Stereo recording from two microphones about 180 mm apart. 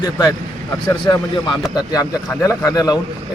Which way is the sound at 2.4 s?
20° left (ahead or behind).